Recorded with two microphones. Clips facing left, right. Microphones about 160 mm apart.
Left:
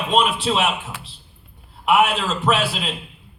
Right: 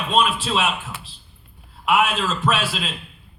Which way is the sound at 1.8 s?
20° left (ahead or behind).